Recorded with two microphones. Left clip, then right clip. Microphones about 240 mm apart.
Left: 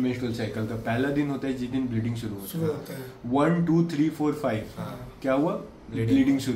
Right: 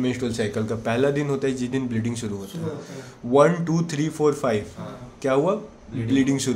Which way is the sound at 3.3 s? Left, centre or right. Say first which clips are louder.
Right 6 dB; right.